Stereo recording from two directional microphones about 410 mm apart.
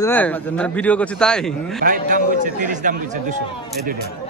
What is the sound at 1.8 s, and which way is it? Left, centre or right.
A man's voice, centre.